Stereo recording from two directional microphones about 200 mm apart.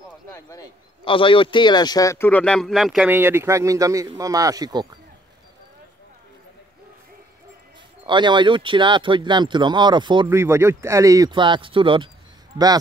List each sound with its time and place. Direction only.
0.3 s speech: 15° left (ahead or behind); by 4.8 s 20° right (ahead or behind)
8.0 s speech: 25° right (ahead or behind)
10.2 s speech: 10° right (ahead or behind)